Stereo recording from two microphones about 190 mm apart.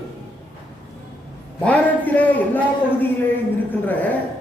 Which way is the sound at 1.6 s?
10° left (ahead or behind).